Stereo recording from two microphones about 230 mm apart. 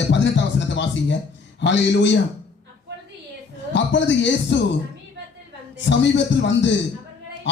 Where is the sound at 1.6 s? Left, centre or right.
Left.